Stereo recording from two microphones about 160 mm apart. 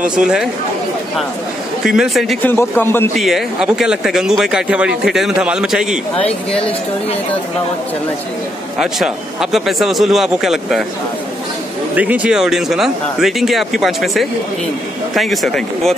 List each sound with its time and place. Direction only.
0.0 s speech: 5° right (ahead or behind)
1.9 s speech: centre (ahead or behind)
2.4 s a man's voice: 15° left (ahead or behind)
3.2 s speech: centre (ahead or behind)
8.7 s speech: 5° right (ahead or behind)
11.9 s speech: 10° right (ahead or behind)